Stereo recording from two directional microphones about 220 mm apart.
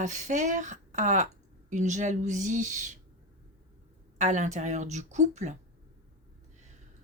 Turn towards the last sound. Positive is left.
turn(degrees=-30)  # may be behind; listen again after turning